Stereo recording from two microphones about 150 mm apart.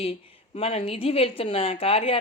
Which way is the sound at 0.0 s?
40° left (ahead or behind).